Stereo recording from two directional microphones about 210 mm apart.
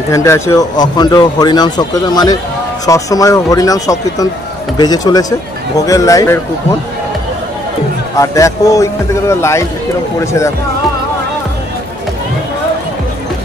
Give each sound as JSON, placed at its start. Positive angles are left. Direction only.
{"t": 0.1, "sound": "a man's voice", "side_deg": 15}
{"t": 8.2, "sound": "a man's voice", "side_deg": 15}